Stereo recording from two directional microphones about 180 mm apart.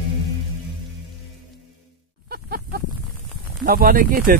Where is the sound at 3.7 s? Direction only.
55° right (ahead or behind).